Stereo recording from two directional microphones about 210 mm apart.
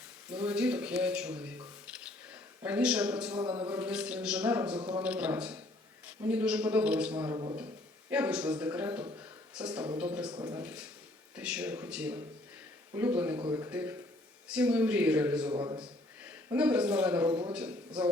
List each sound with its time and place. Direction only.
0.3 s speech: 5° right (ahead or behind)
3.4 s a man's voice: 25° right (ahead or behind)
3.7 s speech: 5° right (ahead or behind)
4.8 s a man's voice: 25° right (ahead or behind)
5.0 s speech: 5° right (ahead or behind)
8.1 s a man's voice: 5° right (ahead or behind)
9.1 s a sound: 5° right (ahead or behind)
10.3 s a man's voice: 15° right (ahead or behind)
11.3 s a man's voice: 5° right (ahead or behind)
15.5 s a man's voice: 20° right (ahead or behind)
16.2 s speech: 5° right (ahead or behind)